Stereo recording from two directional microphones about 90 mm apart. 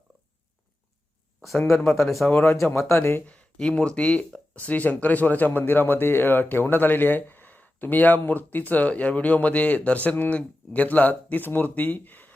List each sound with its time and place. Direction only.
1.4 s speech: centre (ahead or behind)
2.3 s speech: 30° left (ahead or behind)
3.2 s speech: 15° left (ahead or behind)